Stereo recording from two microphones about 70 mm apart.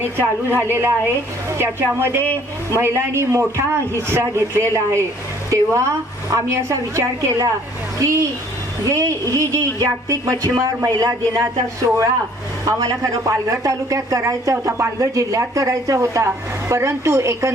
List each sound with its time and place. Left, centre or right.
0.0 s a woman's voice: right
11.3 s speech: right
12.6 s speech: right
14.5 s speech: right